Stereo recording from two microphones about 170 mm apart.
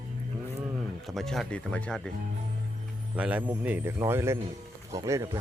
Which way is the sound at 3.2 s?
10° right (ahead or behind).